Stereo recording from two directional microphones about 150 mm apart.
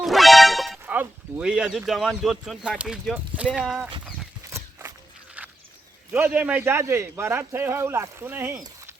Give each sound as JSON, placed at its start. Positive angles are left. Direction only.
{"t": 0.0, "sound": "music", "side_deg": 0}
{"t": 0.9, "sound": "speech", "side_deg": -5}
{"t": 4.4, "sound": "walk", "side_deg": -20}
{"t": 6.1, "sound": "a man's voice", "side_deg": -10}